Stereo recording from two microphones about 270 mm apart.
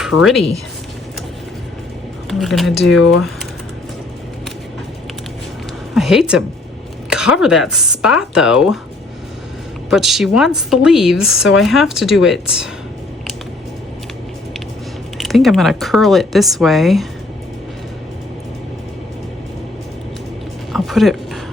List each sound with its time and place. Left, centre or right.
0.0 s speech: centre
2.4 s speech: centre
5.9 s a woman's voice: centre
9.9 s speech: centre
15.2 s speech: centre
20.7 s a sound: centre